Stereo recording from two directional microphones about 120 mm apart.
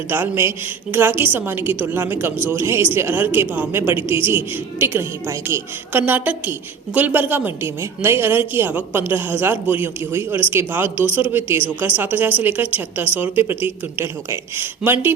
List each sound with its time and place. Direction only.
0.1 s a woman's voice: 20° right (ahead or behind)